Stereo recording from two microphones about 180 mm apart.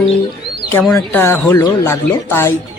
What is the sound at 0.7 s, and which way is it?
Speech, 10° left (ahead or behind).